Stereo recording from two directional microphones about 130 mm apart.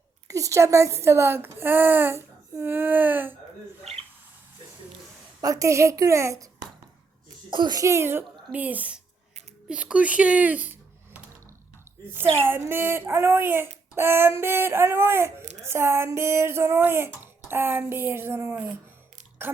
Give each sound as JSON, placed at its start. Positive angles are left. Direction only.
{"t": 0.3, "sound": "speech", "side_deg": -25}
{"t": 5.4, "sound": "speech", "side_deg": -25}
{"t": 7.5, "sound": "speech", "side_deg": -35}
{"t": 8.5, "sound": "a sound", "side_deg": -10}
{"t": 12.2, "sound": "speech", "side_deg": -45}
{"t": 12.5, "sound": "a sound", "side_deg": -20}
{"t": 13.9, "sound": "speech", "side_deg": -20}
{"t": 15.4, "sound": "a sound", "side_deg": -60}
{"t": 15.6, "sound": "speech", "side_deg": -20}